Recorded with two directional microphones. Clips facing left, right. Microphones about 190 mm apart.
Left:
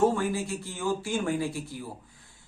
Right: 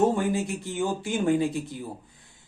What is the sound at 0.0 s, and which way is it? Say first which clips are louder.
A man's voice: right 2 dB; 20° right (ahead or behind).